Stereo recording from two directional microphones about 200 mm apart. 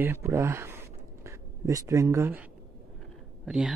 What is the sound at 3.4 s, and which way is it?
Speech, 5° right (ahead or behind).